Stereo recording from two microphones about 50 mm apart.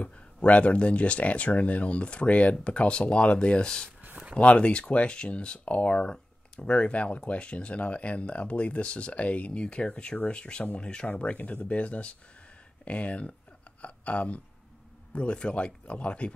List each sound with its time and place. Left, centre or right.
0.0 s speech: left